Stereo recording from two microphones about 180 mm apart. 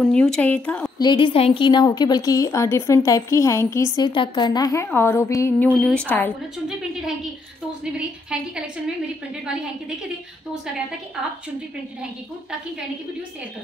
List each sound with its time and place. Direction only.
0.1 s speech: 5° left (ahead or behind)
0.9 s a woman's voice: 25° left (ahead or behind)
5.8 s speech: 5° left (ahead or behind)
7.8 s a woman's voice: 5° right (ahead or behind)